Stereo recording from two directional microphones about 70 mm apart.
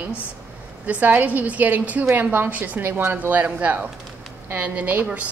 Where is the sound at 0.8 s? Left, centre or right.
Right.